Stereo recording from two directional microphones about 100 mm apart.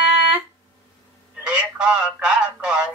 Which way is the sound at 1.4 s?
10° right (ahead or behind).